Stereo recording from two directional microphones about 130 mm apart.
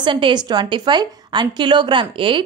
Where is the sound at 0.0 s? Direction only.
35° right (ahead or behind).